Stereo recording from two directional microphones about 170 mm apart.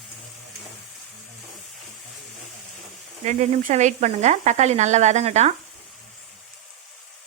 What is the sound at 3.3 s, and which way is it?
Speech, 45° right (ahead or behind).